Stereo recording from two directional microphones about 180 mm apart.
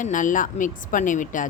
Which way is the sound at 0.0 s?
45° left (ahead or behind).